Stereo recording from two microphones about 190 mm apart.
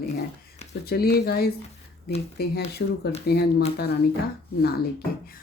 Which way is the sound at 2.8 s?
60° left (ahead or behind).